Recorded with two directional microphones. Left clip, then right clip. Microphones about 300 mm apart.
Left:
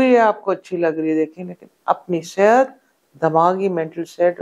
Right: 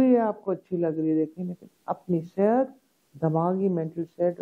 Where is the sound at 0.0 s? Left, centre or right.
Centre.